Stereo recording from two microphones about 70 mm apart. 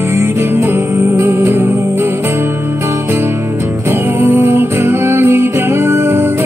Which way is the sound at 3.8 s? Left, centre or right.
Right.